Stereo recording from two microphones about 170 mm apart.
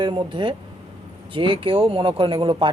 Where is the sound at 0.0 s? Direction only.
25° right (ahead or behind).